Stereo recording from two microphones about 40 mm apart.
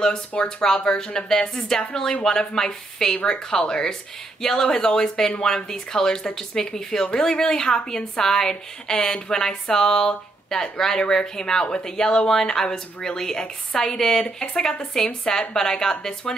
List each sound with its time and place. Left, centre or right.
0.4 s a woman's voice: centre